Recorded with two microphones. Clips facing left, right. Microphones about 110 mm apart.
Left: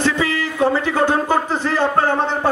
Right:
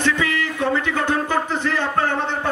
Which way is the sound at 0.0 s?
30° left (ahead or behind).